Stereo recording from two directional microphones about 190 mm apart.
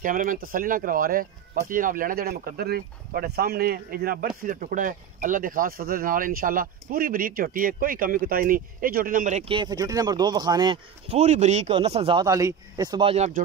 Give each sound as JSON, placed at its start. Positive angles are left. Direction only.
{"t": 0.0, "sound": "speech", "side_deg": -45}
{"t": 9.4, "sound": "speech", "side_deg": -25}